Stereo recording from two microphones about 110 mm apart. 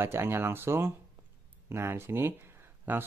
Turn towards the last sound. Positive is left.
turn(degrees=-15)  # may be behind; listen again after turning